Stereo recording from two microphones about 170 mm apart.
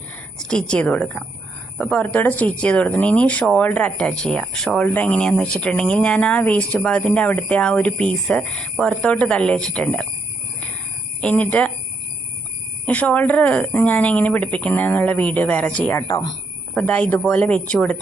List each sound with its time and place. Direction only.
0.4 s speech: 5° left (ahead or behind)
11.2 s speech: 5° left (ahead or behind)
12.8 s speech: 10° left (ahead or behind)
16.0 s speech: 20° left (ahead or behind)
16.7 s speech: 10° left (ahead or behind)